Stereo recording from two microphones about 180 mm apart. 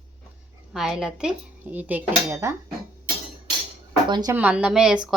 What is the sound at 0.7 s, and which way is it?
Frying, centre (ahead or behind).